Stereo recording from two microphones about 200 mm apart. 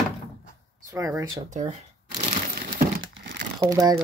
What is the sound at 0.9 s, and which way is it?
Speech, 15° right (ahead or behind).